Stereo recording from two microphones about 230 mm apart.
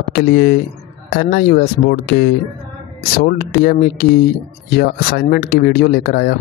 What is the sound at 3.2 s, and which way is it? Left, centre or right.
Speech, left.